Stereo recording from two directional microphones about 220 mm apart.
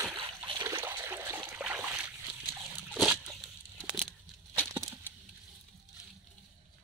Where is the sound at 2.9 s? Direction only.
Centre (ahead or behind).